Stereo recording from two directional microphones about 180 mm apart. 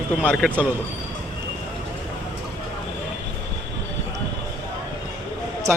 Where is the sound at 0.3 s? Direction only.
10° right (ahead or behind).